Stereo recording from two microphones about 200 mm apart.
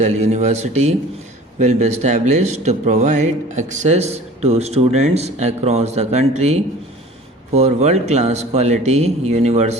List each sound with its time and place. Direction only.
0.0 s speech: 35° right (ahead or behind)